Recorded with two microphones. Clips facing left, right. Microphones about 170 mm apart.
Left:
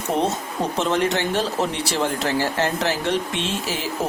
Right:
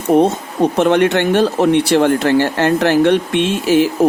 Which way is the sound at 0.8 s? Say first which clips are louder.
Right 8 dB; 65° right (ahead or behind).